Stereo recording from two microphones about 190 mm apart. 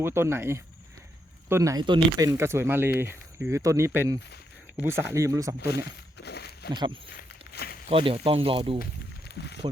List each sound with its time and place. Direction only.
0.0 s speech: 15° right (ahead or behind)
5.5 s a sound: 55° left (ahead or behind)
6.7 s speech: 25° right (ahead or behind)
7.2 s walk: 55° left (ahead or behind)
7.9 s speech: 30° right (ahead or behind)
8.8 s walk: 60° left (ahead or behind)